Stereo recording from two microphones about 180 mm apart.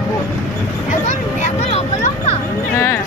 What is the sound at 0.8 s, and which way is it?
Vehicle, 40° left (ahead or behind).